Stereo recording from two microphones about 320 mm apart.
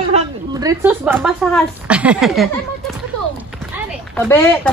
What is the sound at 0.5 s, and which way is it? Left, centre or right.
Speech, centre.